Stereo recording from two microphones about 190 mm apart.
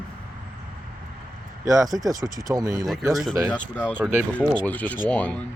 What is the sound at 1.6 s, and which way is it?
Speech, 15° right (ahead or behind).